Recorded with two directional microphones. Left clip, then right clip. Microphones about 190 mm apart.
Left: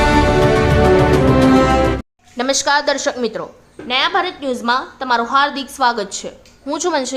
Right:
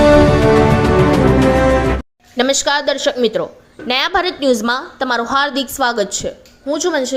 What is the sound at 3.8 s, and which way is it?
A woman's voice, 35° right (ahead or behind).